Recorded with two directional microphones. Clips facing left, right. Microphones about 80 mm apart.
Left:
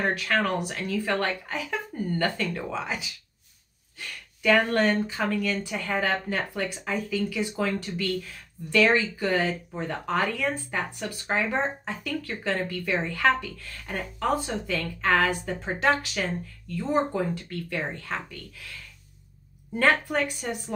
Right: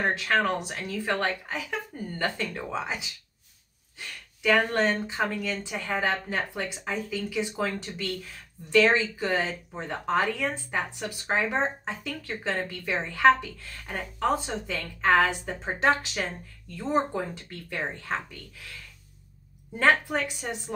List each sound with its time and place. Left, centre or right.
0.1 s speech: right
2.7 s speech: right
4.4 s speech: centre
19.8 s speech: right